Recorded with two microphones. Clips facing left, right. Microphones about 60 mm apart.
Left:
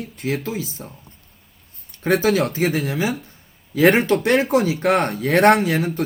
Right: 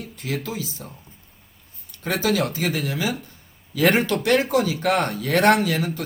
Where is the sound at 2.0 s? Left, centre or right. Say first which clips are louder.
Left 5 dB; left.